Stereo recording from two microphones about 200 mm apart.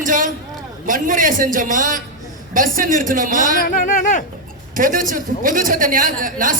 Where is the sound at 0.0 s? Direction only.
40° right (ahead or behind).